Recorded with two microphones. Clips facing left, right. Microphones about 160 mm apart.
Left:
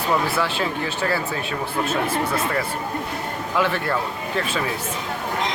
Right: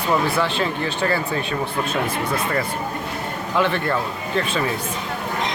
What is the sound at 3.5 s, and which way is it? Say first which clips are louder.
Speech: right 2 dB; 5° left (ahead or behind).